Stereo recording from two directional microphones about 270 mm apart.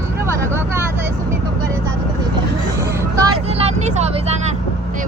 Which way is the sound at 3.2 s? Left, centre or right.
Right.